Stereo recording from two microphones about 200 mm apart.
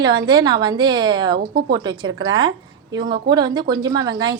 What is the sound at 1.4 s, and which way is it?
Speech, 50° right (ahead or behind).